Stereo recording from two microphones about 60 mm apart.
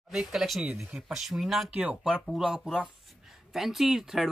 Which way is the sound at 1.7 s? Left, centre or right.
Right.